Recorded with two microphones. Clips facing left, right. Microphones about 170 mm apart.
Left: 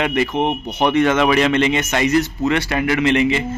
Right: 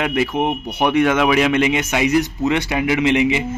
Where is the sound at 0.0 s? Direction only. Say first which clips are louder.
Left 1 dB; 5° right (ahead or behind).